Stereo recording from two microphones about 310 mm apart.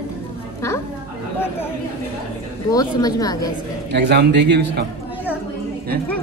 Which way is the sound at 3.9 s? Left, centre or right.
Right.